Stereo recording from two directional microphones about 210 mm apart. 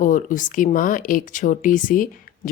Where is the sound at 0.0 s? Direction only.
40° left (ahead or behind).